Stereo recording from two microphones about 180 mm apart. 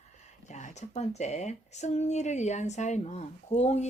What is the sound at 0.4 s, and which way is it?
Speech, 40° left (ahead or behind).